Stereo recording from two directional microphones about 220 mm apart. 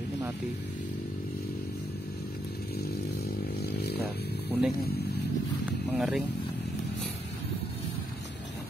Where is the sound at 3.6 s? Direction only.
45° left (ahead or behind).